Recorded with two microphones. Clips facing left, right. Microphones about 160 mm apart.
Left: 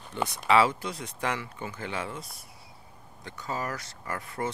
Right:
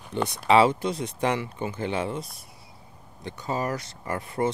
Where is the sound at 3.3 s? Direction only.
25° right (ahead or behind).